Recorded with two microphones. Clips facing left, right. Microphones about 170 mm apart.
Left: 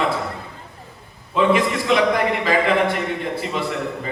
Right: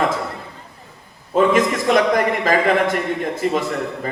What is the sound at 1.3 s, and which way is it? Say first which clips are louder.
A man's voice: right 2 dB; 45° right (ahead or behind).